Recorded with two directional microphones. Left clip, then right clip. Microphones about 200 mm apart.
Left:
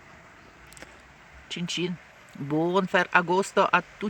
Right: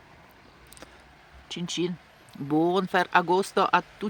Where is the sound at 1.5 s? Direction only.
5° right (ahead or behind).